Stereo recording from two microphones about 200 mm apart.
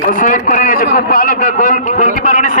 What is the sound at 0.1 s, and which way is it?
A man's voice, 45° left (ahead or behind).